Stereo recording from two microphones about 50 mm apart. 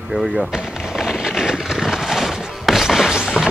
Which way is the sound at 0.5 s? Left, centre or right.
Centre.